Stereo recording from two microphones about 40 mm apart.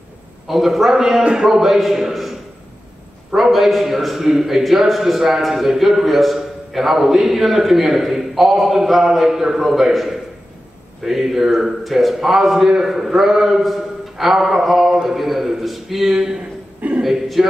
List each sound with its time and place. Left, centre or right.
0.5 s a man's voice: centre
1.2 s speech: centre
1.6 s a man's voice: centre
14.9 s a man's voice: centre
15.1 s a man's voice: centre